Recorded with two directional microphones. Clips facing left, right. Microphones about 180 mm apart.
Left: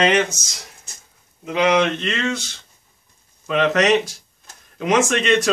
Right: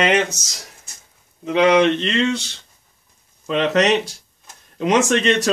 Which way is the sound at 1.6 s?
30° right (ahead or behind).